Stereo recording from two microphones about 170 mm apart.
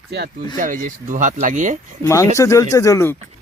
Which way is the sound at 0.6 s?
50° right (ahead or behind).